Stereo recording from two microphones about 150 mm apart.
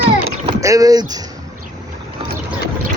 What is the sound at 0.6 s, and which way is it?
Speech, 20° right (ahead or behind).